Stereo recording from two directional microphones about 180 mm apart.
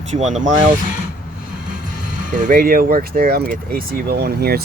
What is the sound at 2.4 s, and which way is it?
Speech, 50° right (ahead or behind).